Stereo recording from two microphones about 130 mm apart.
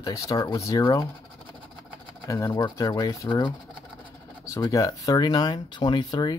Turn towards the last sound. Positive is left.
turn(degrees=35)  # may be behind; listen again after turning